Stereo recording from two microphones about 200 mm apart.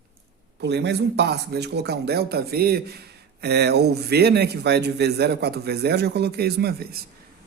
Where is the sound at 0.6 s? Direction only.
60° right (ahead or behind).